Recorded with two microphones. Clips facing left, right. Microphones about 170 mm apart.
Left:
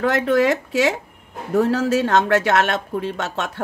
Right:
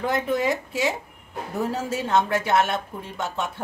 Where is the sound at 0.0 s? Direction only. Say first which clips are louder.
Left 6 dB; 80° left.